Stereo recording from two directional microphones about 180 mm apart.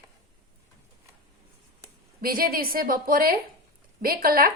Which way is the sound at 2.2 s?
55° right (ahead or behind).